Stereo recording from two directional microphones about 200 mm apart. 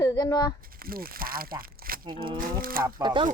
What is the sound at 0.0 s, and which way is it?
Speech, 20° left (ahead or behind).